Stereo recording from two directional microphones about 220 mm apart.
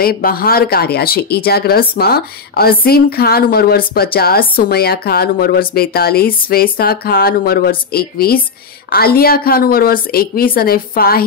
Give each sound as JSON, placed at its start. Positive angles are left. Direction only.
{"t": 0.0, "sound": "speech", "side_deg": 40}